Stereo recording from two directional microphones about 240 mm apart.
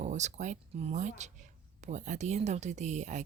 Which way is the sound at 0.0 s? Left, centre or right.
Right.